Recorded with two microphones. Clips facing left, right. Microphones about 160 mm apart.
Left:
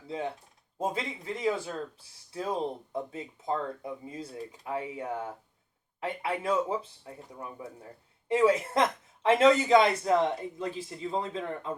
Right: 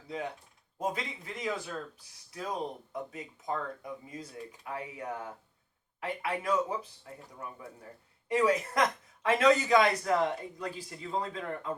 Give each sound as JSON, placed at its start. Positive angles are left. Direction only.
{"t": 0.1, "sound": "speech", "side_deg": 25}